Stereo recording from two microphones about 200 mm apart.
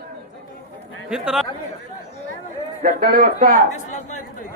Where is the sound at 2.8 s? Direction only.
50° right (ahead or behind).